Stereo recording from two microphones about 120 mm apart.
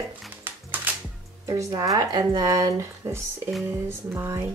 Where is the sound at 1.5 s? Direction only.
25° right (ahead or behind).